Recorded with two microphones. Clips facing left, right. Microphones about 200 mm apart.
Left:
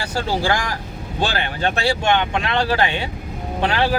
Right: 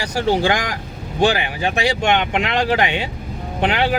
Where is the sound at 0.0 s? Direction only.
15° right (ahead or behind).